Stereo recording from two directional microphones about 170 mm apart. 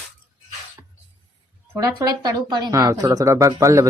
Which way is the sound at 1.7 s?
20° right (ahead or behind).